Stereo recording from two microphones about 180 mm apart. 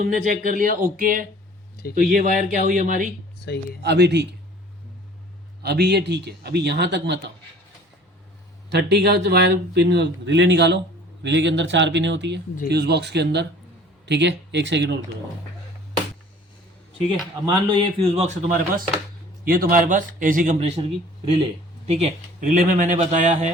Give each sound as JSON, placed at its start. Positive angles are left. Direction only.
{"t": 0.0, "sound": "a man's voice", "side_deg": -50}
{"t": 3.8, "sound": "speech", "side_deg": -70}
{"t": 5.6, "sound": "speech", "side_deg": -65}
{"t": 8.7, "sound": "speech", "side_deg": -65}
{"t": 12.6, "sound": "speech", "side_deg": -65}
{"t": 17.4, "sound": "a man's voice", "side_deg": -25}
{"t": 19.5, "sound": "a man's voice", "side_deg": -55}
{"t": 21.8, "sound": "speech", "side_deg": -35}
{"t": 22.4, "sound": "a man's voice", "side_deg": -50}